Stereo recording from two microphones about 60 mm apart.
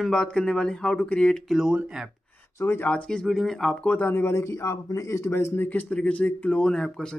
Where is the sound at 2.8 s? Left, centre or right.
Centre.